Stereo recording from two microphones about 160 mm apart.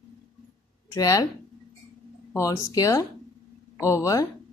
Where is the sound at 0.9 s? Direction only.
20° left (ahead or behind).